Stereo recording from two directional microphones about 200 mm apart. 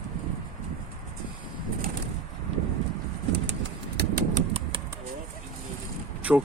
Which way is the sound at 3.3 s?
60° right (ahead or behind).